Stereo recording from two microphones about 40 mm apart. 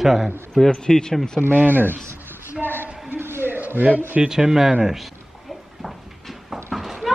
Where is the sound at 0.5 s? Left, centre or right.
Centre.